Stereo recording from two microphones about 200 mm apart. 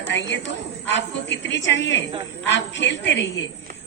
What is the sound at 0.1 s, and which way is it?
A woman's voice, 60° left (ahead or behind).